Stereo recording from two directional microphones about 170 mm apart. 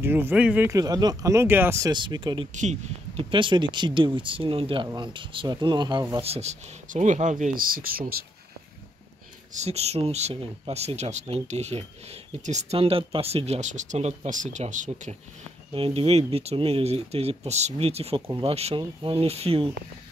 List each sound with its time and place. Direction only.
0.0 s speech: 10° right (ahead or behind); by 2.4 s 30° right (ahead or behind)
2.5 s speech: 45° right (ahead or behind); by 6.2 s 25° right (ahead or behind)
6.2 s speech: 40° right (ahead or behind); by 8.2 s 60° right (ahead or behind)
9.5 s speech: 40° right (ahead or behind)
15.7 s speech: 30° right (ahead or behind)